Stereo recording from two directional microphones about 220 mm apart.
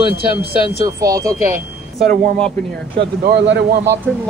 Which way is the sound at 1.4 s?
40° right (ahead or behind).